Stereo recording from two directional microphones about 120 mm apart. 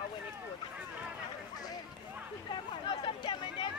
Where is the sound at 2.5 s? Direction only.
40° left (ahead or behind).